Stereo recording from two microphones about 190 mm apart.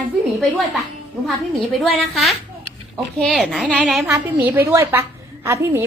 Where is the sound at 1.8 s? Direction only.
Centre (ahead or behind).